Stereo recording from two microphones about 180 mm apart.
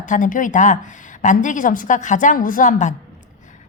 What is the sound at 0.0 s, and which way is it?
A woman's voice, 45° left (ahead or behind).